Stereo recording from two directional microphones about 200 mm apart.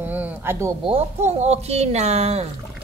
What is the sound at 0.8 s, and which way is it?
Speech, 30° right (ahead or behind).